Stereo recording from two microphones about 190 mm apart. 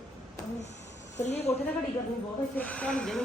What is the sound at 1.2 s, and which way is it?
Speech, 35° left (ahead or behind).